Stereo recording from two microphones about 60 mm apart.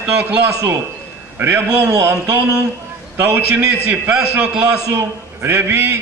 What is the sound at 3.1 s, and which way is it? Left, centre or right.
Speech, right.